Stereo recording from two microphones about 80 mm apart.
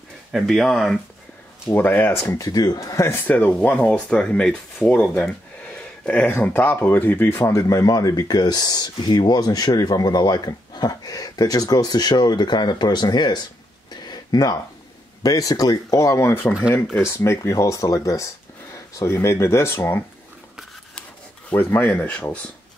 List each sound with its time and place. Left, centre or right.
0.3 s speech: centre
1.8 s speech: left
2.3 s speech: left
3.0 s speech: left
3.3 s speech: left
13.8 s a sound: left
15.2 s speech: left
21.5 s speech: left